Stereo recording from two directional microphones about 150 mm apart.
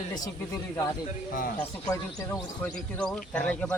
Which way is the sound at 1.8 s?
20° left (ahead or behind).